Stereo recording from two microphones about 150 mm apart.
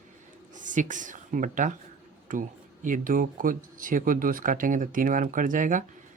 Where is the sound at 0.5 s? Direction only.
60° right (ahead or behind).